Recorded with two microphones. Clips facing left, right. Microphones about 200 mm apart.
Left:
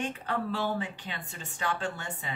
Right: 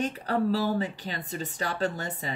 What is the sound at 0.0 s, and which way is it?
A woman's voice, 40° right (ahead or behind).